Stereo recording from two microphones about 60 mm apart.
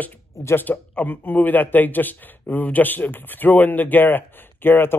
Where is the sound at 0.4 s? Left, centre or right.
Left.